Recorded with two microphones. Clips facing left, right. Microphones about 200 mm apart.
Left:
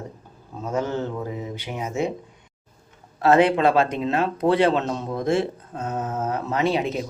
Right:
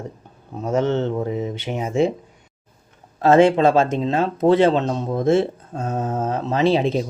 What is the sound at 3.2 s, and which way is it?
Speech, 25° right (ahead or behind).